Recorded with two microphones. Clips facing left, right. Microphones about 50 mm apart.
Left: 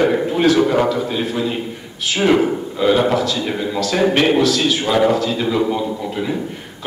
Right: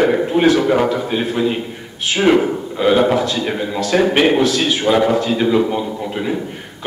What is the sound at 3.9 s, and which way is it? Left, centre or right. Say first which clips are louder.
A man's voice: right 2 dB; centre.